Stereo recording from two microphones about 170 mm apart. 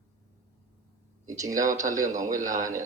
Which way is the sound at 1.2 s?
20° right (ahead or behind).